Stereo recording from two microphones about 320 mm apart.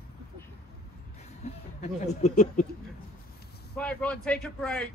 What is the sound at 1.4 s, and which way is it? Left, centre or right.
Speech, left.